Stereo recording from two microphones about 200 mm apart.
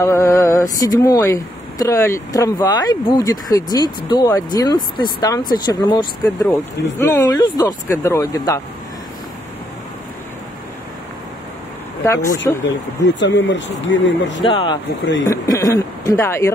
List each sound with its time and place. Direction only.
0.0 s speech: 15° left (ahead or behind)
12.1 s speech: 15° left (ahead or behind)
12.6 s speech: 65° left (ahead or behind)
14.4 s speech: 25° left (ahead or behind)